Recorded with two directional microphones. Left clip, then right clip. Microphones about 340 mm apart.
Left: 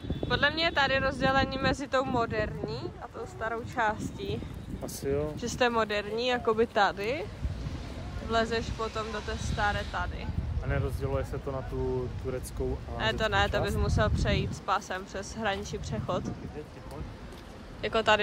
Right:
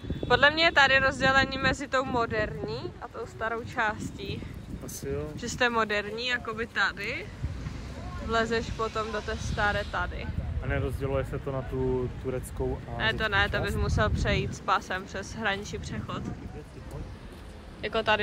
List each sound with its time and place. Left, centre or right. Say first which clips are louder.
0.2 s speech: right 5 dB; centre
4.8 s speech: left 4 dB; left
5.4 s speech: right 3 dB; centre
8.3 s speech: right 1 dB; centre
10.7 s speech: right 2 dB; right
13.0 s speech: right 1 dB; centre
17.8 s speech: left 1 dB; centre